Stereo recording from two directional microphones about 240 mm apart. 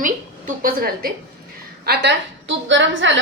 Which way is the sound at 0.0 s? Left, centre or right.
Right.